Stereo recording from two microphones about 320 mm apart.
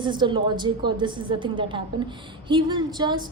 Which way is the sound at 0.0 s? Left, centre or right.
Centre.